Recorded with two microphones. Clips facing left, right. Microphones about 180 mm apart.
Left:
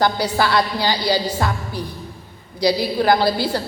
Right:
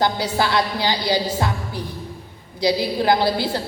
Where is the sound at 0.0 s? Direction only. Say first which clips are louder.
Left 2 dB; 20° right (ahead or behind).